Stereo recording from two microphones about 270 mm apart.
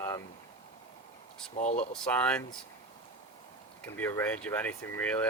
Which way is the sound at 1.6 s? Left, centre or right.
Left.